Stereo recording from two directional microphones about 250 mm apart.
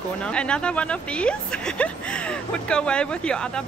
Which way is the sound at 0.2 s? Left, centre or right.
Centre.